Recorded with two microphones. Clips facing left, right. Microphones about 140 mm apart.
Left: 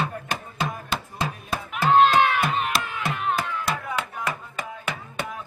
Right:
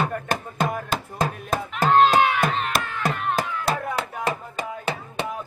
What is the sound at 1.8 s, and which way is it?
Speech, 45° right (ahead or behind).